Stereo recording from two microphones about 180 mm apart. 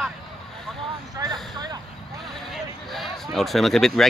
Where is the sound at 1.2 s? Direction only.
20° right (ahead or behind).